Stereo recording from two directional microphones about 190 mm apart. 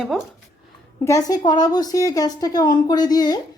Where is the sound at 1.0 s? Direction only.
15° left (ahead or behind).